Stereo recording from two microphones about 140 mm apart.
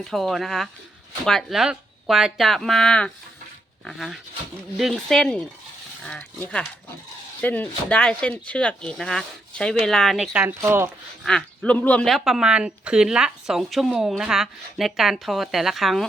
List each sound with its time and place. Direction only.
0.0 s speech: centre (ahead or behind)
10.3 s speech: 15° right (ahead or behind)
11.3 s speech: 5° left (ahead or behind)